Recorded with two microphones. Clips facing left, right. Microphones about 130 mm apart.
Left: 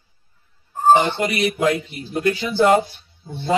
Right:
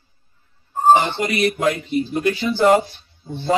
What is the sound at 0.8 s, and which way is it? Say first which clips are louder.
Speech: even; 10° left (ahead or behind).